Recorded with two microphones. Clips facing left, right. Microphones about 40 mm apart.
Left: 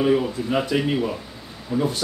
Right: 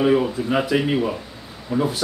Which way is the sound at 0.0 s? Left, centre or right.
Centre.